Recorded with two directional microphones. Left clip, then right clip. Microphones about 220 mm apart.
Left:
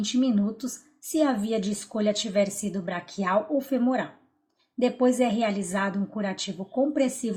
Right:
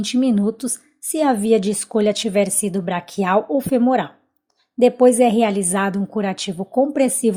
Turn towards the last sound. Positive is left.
turn(degrees=-40)  # may be behind; listen again after turning